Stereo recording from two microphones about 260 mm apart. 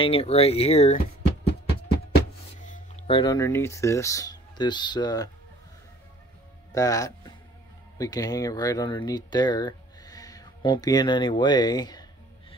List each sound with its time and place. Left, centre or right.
0.0 s speech: left
2.6 s speech: left
6.7 s speech: centre